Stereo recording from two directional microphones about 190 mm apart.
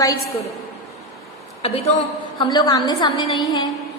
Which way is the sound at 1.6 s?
30° left (ahead or behind).